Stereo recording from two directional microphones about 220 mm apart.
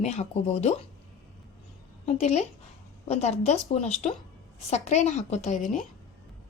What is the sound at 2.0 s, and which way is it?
A woman's voice, 30° left (ahead or behind).